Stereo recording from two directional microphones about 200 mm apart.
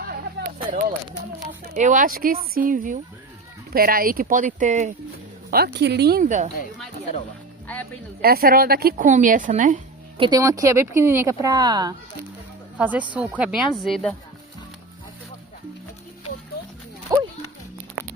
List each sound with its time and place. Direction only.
0.4 s a sound: 60° right (ahead or behind)
1.6 s speech: 40° right (ahead or behind)
5.5 s speech: 50° right (ahead or behind)
8.2 s a woman's voice: 50° right (ahead or behind)
10.2 s speech: 20° right (ahead or behind)
12.7 s speech: 5° right (ahead or behind)
17.1 s speech: 15° right (ahead or behind)